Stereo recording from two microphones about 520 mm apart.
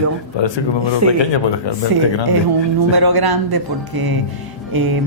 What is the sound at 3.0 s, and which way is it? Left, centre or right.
A woman's voice, right.